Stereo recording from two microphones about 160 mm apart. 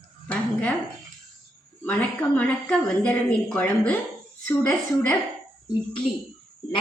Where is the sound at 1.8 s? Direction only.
10° left (ahead or behind).